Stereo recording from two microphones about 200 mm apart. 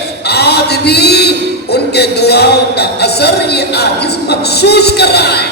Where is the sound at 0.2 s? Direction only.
55° left (ahead or behind).